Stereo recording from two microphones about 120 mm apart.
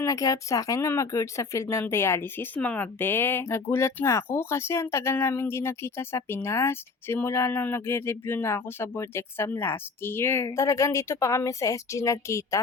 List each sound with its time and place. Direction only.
0.0 s speech: 25° left (ahead or behind)